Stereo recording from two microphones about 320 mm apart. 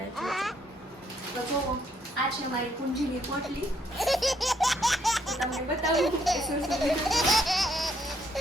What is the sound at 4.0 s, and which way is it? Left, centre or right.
Speech, centre.